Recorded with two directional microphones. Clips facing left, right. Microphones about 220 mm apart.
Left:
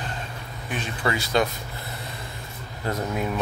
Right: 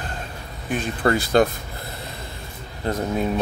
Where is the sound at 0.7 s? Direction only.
50° right (ahead or behind).